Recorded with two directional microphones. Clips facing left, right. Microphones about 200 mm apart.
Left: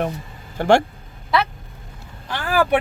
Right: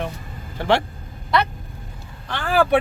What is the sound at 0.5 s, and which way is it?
Speech, 45° left (ahead or behind).